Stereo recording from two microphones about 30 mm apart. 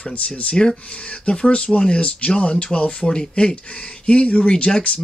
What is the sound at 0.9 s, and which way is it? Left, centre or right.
Speech, left.